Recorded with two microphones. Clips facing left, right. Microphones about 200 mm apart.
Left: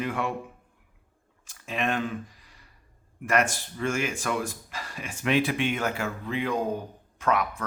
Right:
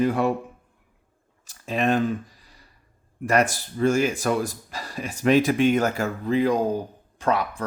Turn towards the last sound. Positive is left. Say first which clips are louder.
# right 2 dB
turn(degrees=-30)  # may be behind; listen again after turning